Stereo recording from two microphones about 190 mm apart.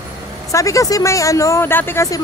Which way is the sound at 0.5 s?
15° left (ahead or behind).